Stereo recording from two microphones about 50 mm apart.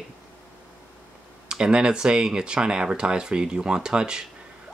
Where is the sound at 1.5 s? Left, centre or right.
Centre.